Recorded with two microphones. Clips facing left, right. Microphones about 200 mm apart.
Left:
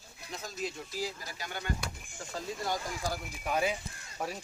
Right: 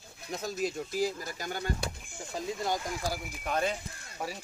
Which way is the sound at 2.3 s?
20° right (ahead or behind).